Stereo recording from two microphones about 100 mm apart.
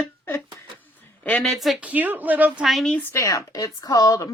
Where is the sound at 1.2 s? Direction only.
10° left (ahead or behind).